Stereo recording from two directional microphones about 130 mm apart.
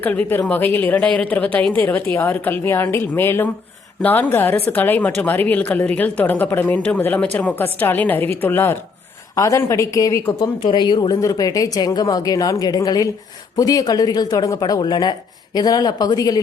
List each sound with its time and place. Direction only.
0.0 s a woman's voice: 15° left (ahead or behind)
10.6 s a woman's voice: 35° left (ahead or behind)